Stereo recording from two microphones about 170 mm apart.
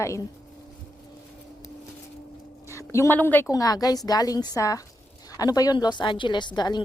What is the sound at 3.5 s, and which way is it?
Speech, 20° left (ahead or behind).